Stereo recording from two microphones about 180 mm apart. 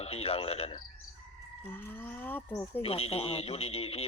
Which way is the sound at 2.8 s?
35° left (ahead or behind).